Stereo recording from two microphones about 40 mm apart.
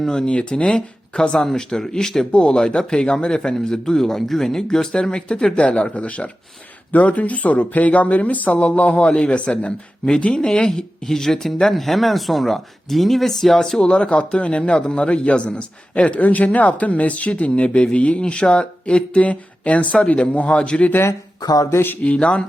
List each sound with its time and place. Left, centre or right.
0.0 s speech: centre
0.3 s a man's voice: left
2.3 s a man's voice: left
13.9 s a man's voice: left
22.0 s speech: left